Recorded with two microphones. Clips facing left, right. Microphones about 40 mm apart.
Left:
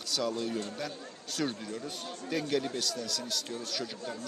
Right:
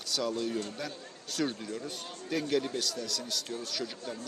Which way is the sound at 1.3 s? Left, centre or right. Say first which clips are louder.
Right 1 dB; centre.